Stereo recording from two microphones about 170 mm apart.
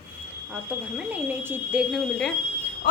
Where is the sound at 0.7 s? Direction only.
10° right (ahead or behind).